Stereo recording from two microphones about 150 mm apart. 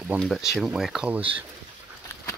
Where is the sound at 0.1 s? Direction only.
10° right (ahead or behind).